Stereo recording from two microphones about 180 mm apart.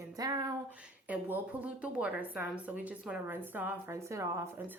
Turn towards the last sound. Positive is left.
turn(degrees=-15)  # may be behind; listen again after turning